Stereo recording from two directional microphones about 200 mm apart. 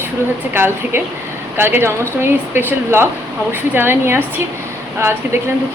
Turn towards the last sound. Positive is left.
turn(degrees=-10)  # may be behind; listen again after turning